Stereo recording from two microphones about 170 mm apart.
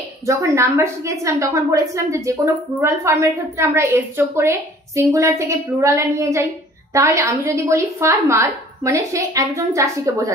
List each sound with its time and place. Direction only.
0.3 s a woman's voice: 15° right (ahead or behind)